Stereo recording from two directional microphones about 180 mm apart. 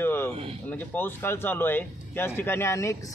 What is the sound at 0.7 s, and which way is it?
Speech, 10° left (ahead or behind).